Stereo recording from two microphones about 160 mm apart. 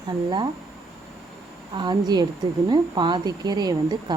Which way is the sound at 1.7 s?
25° right (ahead or behind).